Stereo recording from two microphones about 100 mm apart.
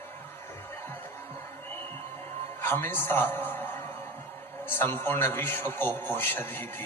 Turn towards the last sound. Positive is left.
turn(degrees=20)  # may be behind; listen again after turning